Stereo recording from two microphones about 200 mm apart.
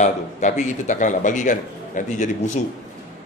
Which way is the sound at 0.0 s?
35° left (ahead or behind).